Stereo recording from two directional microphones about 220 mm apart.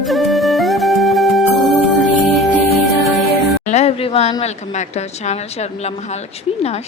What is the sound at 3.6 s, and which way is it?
A woman's voice, 30° left (ahead or behind).